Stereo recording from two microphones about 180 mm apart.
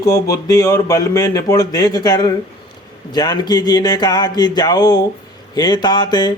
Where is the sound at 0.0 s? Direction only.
20° left (ahead or behind).